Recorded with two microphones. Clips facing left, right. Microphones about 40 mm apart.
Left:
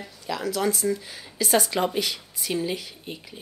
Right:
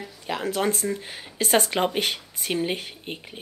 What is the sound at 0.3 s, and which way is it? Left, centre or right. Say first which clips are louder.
Speech: right 1 dB; right.